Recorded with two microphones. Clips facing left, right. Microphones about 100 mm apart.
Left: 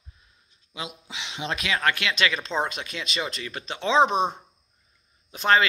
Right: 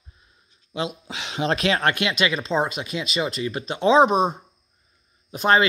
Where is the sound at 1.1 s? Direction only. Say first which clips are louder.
Right 6 dB; 45° right (ahead or behind).